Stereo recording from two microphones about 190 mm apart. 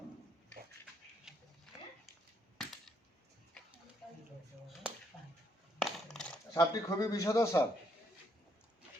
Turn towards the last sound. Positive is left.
turn(degrees=15)  # may be behind; listen again after turning